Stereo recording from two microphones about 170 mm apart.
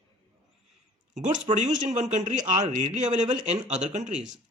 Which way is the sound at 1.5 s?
45° right (ahead or behind).